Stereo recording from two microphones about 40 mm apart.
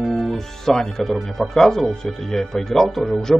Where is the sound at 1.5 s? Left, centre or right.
Centre.